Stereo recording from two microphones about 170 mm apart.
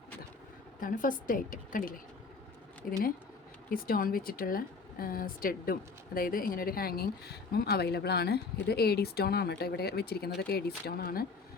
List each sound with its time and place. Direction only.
0.8 s a woman's voice: 55° left (ahead or behind)
3.7 s a woman's voice: 60° left (ahead or behind)